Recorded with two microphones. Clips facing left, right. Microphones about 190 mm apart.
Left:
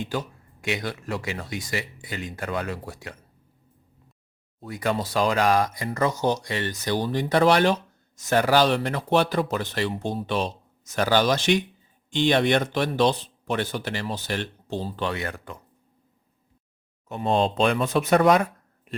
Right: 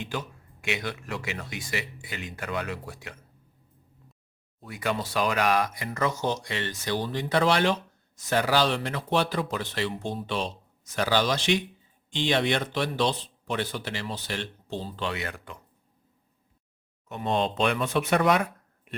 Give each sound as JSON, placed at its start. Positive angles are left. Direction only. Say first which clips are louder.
{"t": 0.8, "sound": "speech", "louder": "left 3 dB", "side_deg": 40}
{"t": 4.6, "sound": "speech", "louder": "left 3 dB", "side_deg": 40}
{"t": 17.1, "sound": "speech", "louder": "left 4 dB", "side_deg": 30}